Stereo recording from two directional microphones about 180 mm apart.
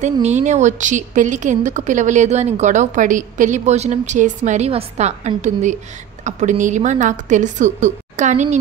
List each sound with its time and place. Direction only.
0.0 s a woman's voice: 40° right (ahead or behind)